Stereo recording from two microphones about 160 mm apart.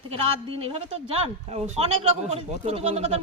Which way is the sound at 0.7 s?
40° right (ahead or behind).